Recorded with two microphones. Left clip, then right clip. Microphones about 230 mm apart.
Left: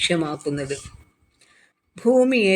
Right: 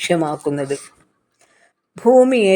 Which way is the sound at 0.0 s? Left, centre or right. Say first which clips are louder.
Right 4 dB; centre.